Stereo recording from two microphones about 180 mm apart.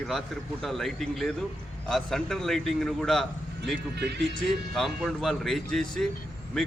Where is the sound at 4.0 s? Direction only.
70° right (ahead or behind).